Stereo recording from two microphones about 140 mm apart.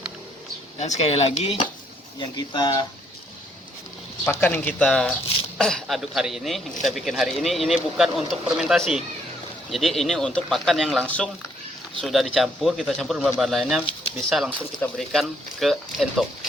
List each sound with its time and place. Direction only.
0.8 s speech: 55° left (ahead or behind)
2.1 s speech: 30° left (ahead or behind)
4.3 s speech: 15° left (ahead or behind); by 16.5 s centre (ahead or behind)